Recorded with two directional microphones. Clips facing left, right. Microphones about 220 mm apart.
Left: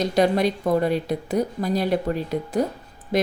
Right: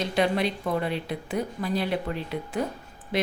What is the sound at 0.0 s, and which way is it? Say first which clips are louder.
A woman's voice: left 5 dB; 40° left (ahead or behind).